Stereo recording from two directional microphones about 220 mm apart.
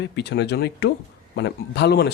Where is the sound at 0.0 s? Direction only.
50° left (ahead or behind).